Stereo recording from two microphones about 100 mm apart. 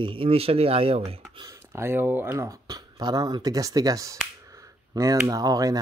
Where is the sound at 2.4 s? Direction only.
40° right (ahead or behind).